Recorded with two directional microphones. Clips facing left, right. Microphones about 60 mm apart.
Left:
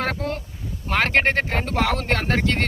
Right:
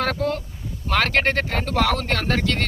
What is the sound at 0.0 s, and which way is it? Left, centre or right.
Speech, left.